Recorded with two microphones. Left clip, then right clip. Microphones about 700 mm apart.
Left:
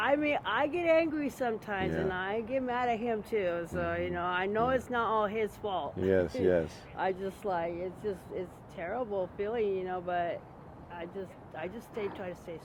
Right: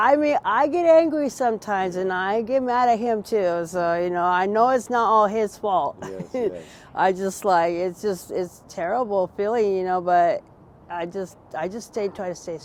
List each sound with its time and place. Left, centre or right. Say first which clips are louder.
0.0 s speech: right 11 dB; right